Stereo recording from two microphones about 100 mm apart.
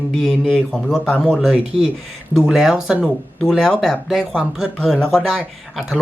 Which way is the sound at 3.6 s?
5° left (ahead or behind).